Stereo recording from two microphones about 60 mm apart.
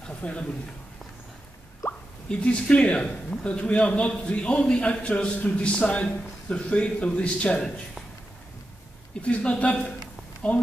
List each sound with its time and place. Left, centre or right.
0.0 s a man's voice: centre
2.2 s a man's voice: centre
9.2 s a man's voice: centre